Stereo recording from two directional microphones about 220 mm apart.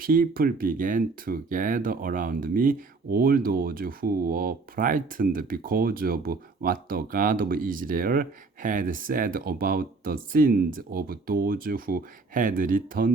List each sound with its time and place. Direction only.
0.0 s speech: 40° right (ahead or behind)